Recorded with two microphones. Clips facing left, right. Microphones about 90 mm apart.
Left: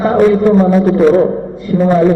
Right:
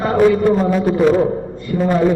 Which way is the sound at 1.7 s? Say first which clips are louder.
Left 6 dB; 15° left (ahead or behind).